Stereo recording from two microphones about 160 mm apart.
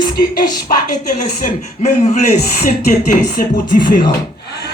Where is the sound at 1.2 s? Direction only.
50° left (ahead or behind).